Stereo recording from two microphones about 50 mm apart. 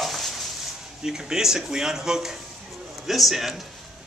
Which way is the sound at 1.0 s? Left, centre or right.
Centre.